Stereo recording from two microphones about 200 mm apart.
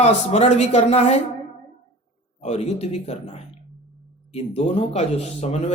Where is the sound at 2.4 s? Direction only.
30° left (ahead or behind).